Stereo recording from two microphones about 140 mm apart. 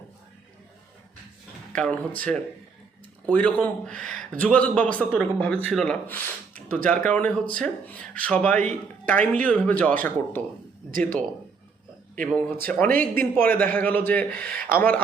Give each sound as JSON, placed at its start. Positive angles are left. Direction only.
{"t": 1.7, "sound": "speech", "side_deg": 5}
{"t": 12.2, "sound": "speech", "side_deg": 10}
{"t": 14.5, "sound": "speech", "side_deg": -90}
{"t": 14.8, "sound": "speech", "side_deg": 10}